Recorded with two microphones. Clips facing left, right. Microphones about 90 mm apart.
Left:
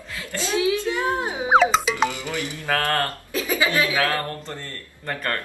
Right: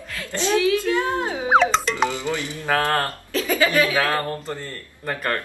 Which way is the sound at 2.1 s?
20° right (ahead or behind).